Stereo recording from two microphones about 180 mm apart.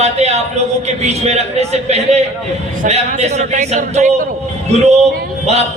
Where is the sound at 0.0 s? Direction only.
35° right (ahead or behind).